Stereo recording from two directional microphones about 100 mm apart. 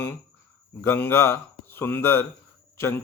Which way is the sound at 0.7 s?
25° left (ahead or behind).